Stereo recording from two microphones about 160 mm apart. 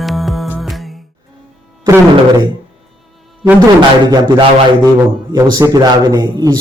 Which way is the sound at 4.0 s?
25° right (ahead or behind).